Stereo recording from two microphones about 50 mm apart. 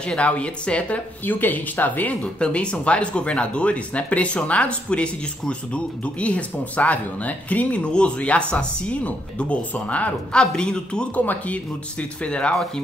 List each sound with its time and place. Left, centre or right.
0.1 s speech: left
1.2 s speech: left
2.4 s speech: left
11.1 s speech: left